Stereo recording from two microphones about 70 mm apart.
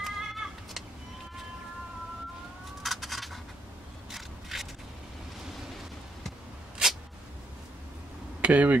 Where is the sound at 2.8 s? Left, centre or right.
Centre.